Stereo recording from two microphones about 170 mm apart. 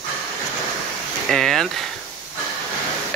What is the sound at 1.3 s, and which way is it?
Speech, centre (ahead or behind).